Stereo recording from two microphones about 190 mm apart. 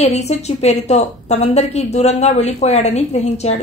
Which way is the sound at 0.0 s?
35° left (ahead or behind).